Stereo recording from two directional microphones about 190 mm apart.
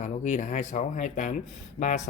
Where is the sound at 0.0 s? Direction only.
40° left (ahead or behind).